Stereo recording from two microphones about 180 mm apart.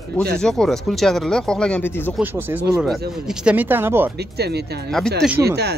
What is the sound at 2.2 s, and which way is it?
Speech, 10° right (ahead or behind).